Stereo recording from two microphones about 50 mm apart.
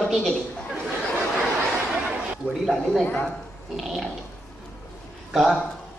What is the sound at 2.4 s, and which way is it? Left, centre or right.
Speech, left.